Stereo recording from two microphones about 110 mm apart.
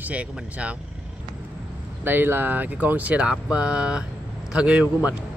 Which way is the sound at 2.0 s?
20° right (ahead or behind).